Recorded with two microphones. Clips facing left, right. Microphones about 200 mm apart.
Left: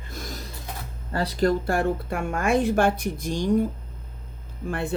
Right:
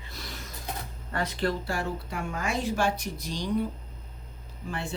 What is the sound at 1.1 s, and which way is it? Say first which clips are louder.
A woman's voice: left 6 dB; 35° left (ahead or behind).